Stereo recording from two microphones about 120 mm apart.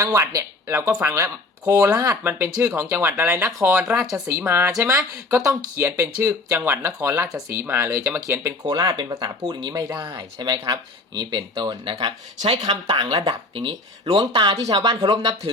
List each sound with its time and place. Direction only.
0.0 s speech: 25° right (ahead or behind)
3.8 s speech: 5° right (ahead or behind)
4.1 s speech: 20° right (ahead or behind)
8.6 s speech: 35° right (ahead or behind)